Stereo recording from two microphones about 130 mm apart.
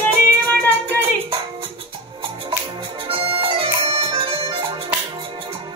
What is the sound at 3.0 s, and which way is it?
Bagpipes, 45° right (ahead or behind).